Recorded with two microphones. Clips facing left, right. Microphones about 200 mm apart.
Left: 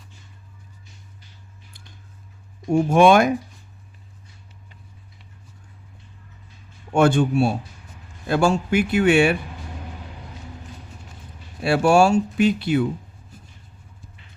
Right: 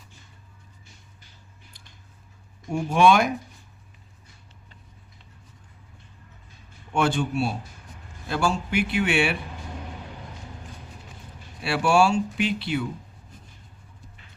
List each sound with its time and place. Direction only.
2.7 s speech: 50° left (ahead or behind)
6.9 s speech: 50° left (ahead or behind)
11.6 s speech: 45° left (ahead or behind)